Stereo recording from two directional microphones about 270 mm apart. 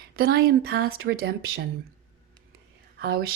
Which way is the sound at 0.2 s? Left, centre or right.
Right.